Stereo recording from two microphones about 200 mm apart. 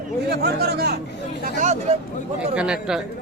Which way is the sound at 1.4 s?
35° right (ahead or behind).